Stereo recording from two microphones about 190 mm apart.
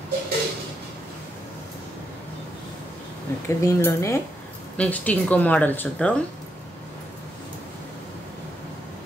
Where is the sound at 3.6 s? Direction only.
15° left (ahead or behind).